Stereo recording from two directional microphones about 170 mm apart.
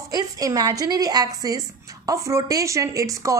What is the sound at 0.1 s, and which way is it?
A woman's voice, 20° right (ahead or behind).